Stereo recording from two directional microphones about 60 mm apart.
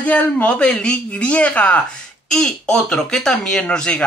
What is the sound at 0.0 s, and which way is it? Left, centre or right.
Speech, left.